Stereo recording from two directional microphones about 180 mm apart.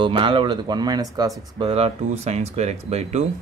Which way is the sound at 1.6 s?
35° right (ahead or behind).